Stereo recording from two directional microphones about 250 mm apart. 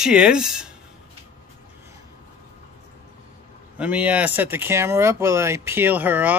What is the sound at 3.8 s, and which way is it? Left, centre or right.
Speech, centre.